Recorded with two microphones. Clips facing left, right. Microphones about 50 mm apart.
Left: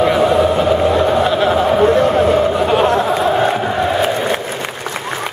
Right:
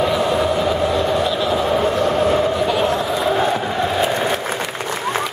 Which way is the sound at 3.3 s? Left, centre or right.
Left.